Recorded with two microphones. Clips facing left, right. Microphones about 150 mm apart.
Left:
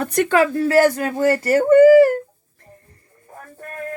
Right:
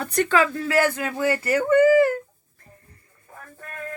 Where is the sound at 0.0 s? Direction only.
50° left (ahead or behind).